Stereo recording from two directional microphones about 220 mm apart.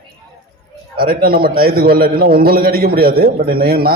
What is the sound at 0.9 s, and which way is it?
A man's voice, 45° right (ahead or behind).